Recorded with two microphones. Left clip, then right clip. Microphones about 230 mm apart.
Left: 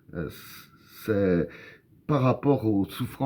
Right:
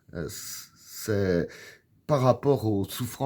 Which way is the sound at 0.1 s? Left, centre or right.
Right.